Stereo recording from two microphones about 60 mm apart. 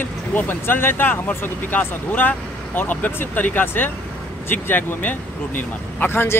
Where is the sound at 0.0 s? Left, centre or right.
Left.